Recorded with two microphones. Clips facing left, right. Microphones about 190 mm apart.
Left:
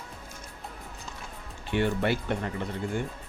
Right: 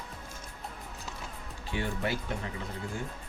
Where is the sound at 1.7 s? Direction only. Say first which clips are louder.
Left 7 dB; 65° left (ahead or behind).